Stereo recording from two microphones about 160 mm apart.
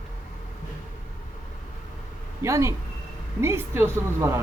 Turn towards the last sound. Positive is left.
turn(degrees=-15)  # may be behind; listen again after turning